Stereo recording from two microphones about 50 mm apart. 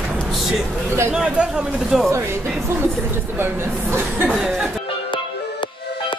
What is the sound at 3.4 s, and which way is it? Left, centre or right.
Speech, right.